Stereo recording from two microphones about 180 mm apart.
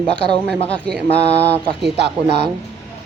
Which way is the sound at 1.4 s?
70° right (ahead or behind).